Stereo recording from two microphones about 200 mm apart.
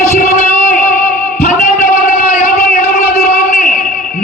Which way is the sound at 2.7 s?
40° left (ahead or behind).